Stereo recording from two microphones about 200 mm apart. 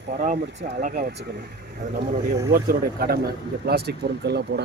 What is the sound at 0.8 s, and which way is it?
Speech, 45° right (ahead or behind).